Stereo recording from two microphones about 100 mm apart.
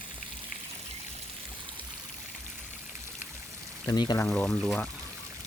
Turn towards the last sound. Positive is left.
turn(degrees=5)  # may be behind; listen again after turning